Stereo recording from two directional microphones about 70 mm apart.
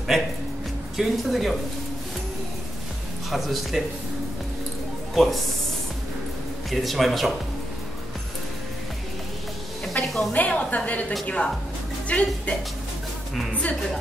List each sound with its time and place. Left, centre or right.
0.9 s a man's voice: centre
3.3 s a man's voice: centre
5.1 s speech: centre
6.7 s a man's voice: centre
9.9 s a woman's voice: centre
10.3 s a woman's voice: centre